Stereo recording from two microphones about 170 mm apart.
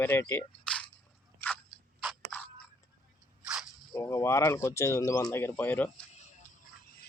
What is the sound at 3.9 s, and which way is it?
Speech, 20° left (ahead or behind).